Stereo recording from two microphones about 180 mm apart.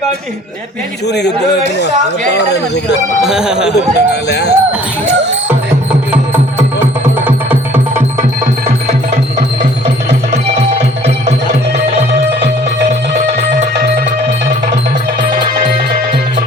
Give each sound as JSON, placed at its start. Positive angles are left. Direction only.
{"t": 1.0, "sound": "a man's voice", "side_deg": 70}
{"t": 2.3, "sound": "a man's voice", "side_deg": 70}
{"t": 3.2, "sound": "speech", "side_deg": -5}
{"t": 3.9, "sound": "a man's voice", "side_deg": 70}